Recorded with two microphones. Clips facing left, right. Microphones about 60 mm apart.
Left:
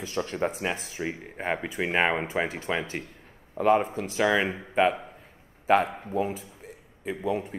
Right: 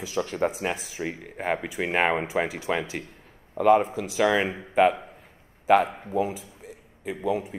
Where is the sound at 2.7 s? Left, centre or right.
Centre.